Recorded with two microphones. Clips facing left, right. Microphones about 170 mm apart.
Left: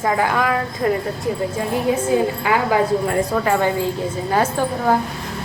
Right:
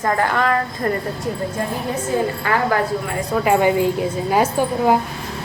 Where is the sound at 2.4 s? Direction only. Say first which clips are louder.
Left 1 dB; 10° left (ahead or behind).